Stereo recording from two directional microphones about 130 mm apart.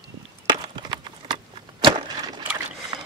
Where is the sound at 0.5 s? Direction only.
35° right (ahead or behind).